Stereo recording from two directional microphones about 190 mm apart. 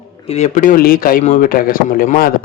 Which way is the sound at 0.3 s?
35° left (ahead or behind).